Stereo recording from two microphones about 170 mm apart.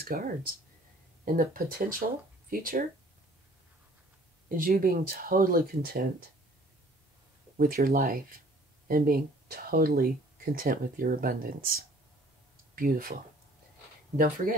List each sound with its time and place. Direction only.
0.1 s speech: 60° right (ahead or behind)
4.5 s speech: 55° right (ahead or behind)
7.5 s speech: 60° right (ahead or behind)